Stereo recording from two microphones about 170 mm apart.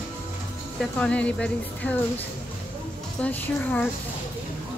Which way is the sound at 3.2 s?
10° left (ahead or behind).